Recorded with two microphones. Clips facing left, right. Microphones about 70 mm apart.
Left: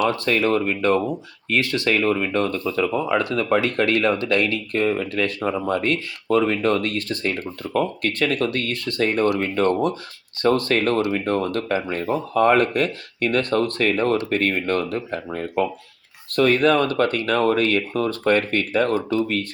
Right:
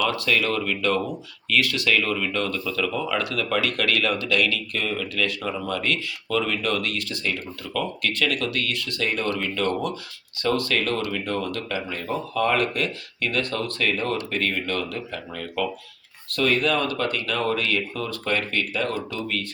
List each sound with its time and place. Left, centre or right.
0.0 s speech: left